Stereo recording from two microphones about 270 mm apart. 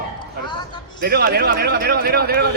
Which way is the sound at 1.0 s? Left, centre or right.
Right.